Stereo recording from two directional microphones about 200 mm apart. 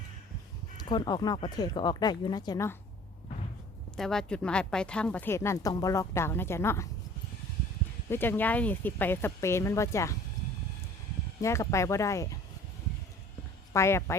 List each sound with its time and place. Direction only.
0.8 s speech: 20° left (ahead or behind)
3.9 s speech: centre (ahead or behind)
8.1 s speech: 10° left (ahead or behind)
11.3 s speech: 15° left (ahead or behind)
13.7 s speech: 15° left (ahead or behind)